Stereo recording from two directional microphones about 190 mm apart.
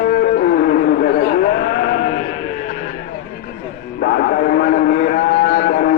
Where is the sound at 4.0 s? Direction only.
55° left (ahead or behind).